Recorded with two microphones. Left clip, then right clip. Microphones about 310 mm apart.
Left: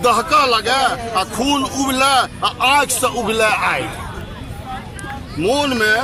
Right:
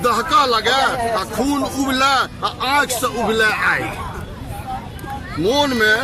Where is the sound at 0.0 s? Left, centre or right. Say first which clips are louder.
Left 2 dB; centre.